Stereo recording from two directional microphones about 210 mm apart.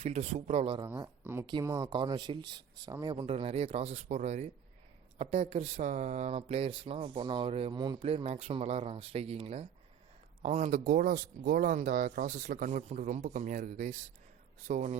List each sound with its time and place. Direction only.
0.0 s speech: 30° right (ahead or behind)
0.9 s speech: 15° right (ahead or behind); by 14.9 s 30° right (ahead or behind)